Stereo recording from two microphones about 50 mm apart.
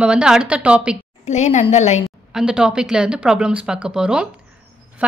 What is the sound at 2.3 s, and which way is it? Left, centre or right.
Speech, centre.